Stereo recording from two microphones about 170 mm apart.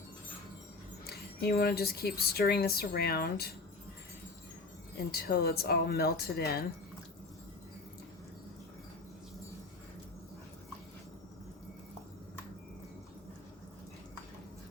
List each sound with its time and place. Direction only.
1.0 s speech: 65° left (ahead or behind)
5.1 s speech: 65° left (ahead or behind)